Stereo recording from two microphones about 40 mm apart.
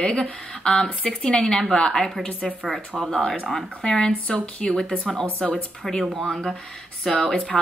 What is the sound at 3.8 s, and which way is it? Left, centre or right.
Speech, centre.